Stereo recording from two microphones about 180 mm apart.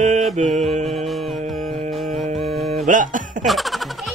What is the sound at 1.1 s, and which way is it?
Speech, centre (ahead or behind).